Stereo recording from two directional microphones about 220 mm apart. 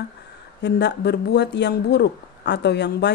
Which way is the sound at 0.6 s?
50° left (ahead or behind).